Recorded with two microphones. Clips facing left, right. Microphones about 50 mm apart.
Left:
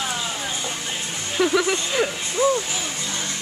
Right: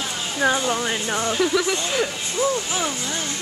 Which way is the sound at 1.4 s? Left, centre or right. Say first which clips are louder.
Left 4 dB; centre.